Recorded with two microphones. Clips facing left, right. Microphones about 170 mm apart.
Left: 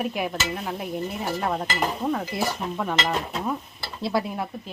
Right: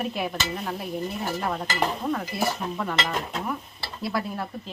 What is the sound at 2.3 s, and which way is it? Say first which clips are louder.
Speech: even; 20° left (ahead or behind).